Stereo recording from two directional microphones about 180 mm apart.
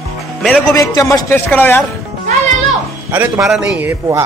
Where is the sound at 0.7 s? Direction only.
20° left (ahead or behind).